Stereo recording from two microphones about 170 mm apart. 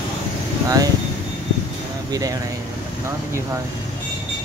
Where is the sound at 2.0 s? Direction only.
20° right (ahead or behind).